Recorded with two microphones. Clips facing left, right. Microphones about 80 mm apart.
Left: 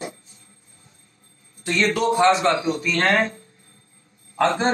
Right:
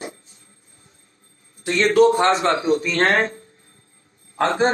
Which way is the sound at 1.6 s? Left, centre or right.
Right.